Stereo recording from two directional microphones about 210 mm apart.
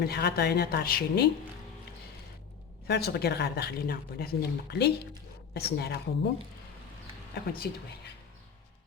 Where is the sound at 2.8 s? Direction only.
50° left (ahead or behind).